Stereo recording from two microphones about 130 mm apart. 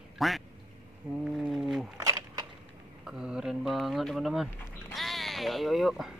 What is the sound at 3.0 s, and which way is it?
Speech, 5° right (ahead or behind).